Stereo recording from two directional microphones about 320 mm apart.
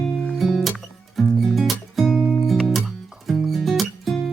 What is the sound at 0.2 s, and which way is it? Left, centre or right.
Music, centre.